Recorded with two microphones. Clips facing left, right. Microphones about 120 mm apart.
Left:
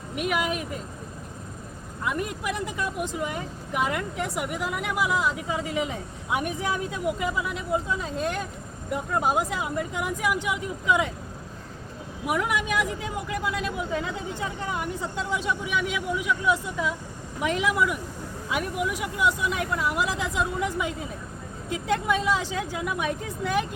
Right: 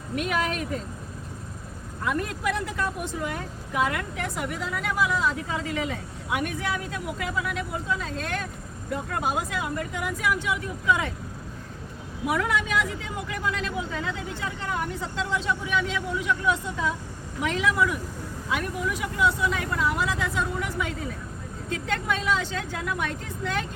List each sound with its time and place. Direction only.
0.2 s speech: 15° left (ahead or behind)
2.0 s speech: 15° left (ahead or behind)
9.6 s speech: 20° left (ahead or behind)
12.3 s speech: 15° left (ahead or behind)